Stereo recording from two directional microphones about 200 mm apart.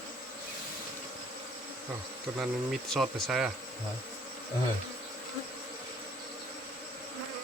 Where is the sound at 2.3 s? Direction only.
Centre (ahead or behind).